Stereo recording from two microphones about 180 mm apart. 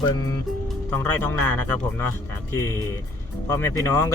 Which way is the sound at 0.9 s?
10° left (ahead or behind).